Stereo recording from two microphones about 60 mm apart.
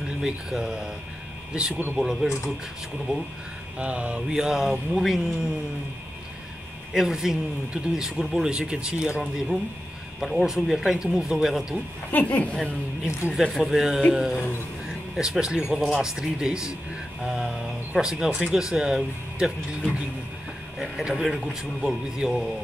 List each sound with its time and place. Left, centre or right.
0.2 s speech: centre
3.7 s speech: right
6.9 s speech: centre
10.2 s speech: centre
12.1 s a woman's voice: left
13.5 s speech: centre
20.8 s speech: centre
21.8 s speech: centre